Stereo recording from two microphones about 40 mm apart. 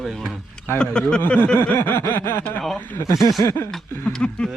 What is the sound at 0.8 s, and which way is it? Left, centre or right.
Speech, left.